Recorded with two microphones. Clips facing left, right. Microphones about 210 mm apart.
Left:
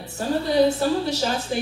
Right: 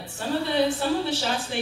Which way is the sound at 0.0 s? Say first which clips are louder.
Left 3 dB; 40° left (ahead or behind).